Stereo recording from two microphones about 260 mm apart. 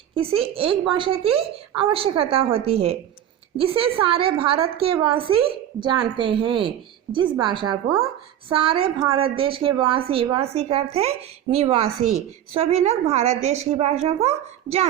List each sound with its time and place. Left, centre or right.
0.1 s a woman's voice: right